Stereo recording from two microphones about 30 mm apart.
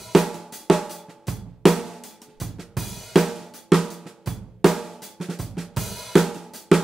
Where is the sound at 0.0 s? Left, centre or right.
Centre.